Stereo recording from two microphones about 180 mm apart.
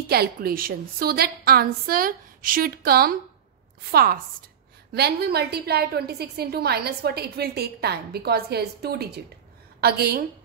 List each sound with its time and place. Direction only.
0.1 s a woman's voice: 60° right (ahead or behind)